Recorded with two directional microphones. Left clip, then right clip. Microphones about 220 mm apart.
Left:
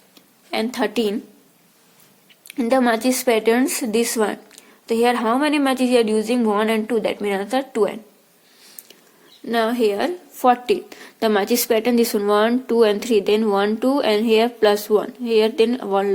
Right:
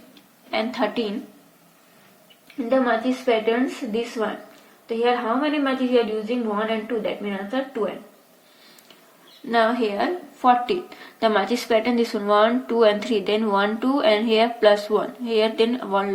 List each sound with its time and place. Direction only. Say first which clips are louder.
0.5 s a woman's voice: left 2 dB; 25° left (ahead or behind)
2.6 s a woman's voice: left 3 dB; 35° left (ahead or behind)
9.5 s a woman's voice: left 1 dB; 25° left (ahead or behind)